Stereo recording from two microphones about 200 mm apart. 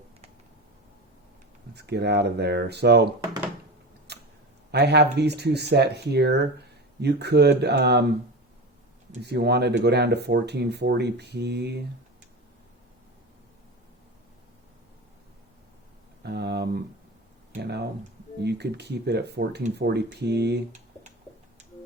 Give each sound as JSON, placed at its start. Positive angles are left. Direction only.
{"t": 1.7, "sound": "speech", "side_deg": -55}
{"t": 4.1, "sound": "tick-tock", "side_deg": -55}
{"t": 4.7, "sound": "speech", "side_deg": -55}
{"t": 9.2, "sound": "speech", "side_deg": -55}
{"t": 16.2, "sound": "speech", "side_deg": -55}